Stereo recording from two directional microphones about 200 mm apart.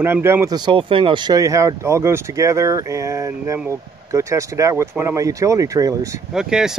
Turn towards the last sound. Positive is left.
turn(degrees=-5)  # may be behind; listen again after turning